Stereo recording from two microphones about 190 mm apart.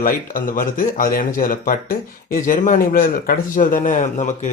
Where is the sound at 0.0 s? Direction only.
45° left (ahead or behind).